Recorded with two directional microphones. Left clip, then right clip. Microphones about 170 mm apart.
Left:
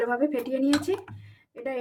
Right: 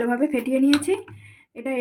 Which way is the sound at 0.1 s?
50° right (ahead or behind).